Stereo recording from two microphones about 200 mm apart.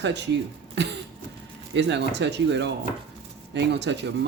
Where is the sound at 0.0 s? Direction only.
60° right (ahead or behind).